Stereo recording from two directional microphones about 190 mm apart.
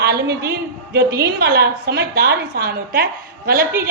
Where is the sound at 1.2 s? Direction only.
60° right (ahead or behind).